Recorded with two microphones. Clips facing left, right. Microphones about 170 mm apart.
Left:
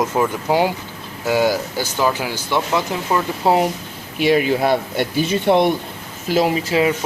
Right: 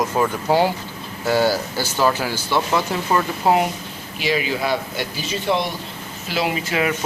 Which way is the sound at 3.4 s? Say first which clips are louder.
Left 1 dB; 30° left (ahead or behind).